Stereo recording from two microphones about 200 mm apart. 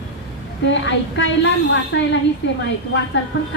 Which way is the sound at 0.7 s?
65° left (ahead or behind).